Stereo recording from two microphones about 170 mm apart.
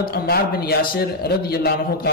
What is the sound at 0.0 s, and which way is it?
A man's voice, 65° left (ahead or behind).